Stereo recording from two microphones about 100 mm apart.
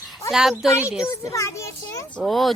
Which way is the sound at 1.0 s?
30° left (ahead or behind).